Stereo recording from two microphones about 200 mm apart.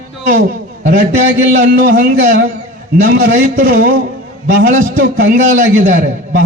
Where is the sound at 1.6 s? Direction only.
45° right (ahead or behind).